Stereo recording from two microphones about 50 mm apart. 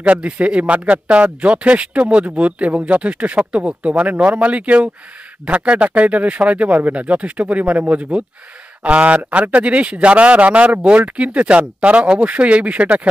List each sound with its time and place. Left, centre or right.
0.0 s speech: right